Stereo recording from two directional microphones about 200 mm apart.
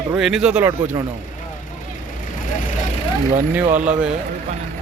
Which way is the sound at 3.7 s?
5° right (ahead or behind).